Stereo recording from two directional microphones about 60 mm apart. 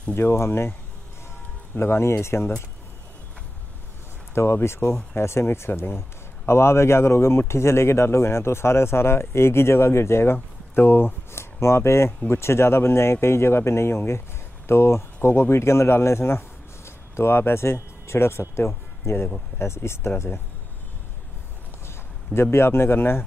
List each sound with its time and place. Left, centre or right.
0.1 s speech: left
1.8 s speech: left
4.3 s speech: left
21.8 s speech: left